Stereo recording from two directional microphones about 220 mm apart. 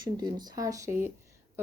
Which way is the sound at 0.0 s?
20° right (ahead or behind).